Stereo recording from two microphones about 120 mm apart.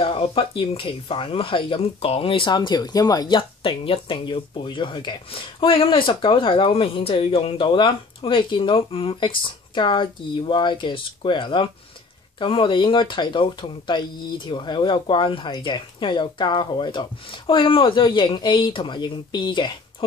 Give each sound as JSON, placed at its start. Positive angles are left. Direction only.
{"t": 0.0, "sound": "speech", "side_deg": 50}